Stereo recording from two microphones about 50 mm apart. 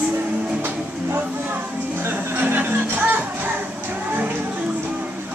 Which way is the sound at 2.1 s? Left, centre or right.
Right.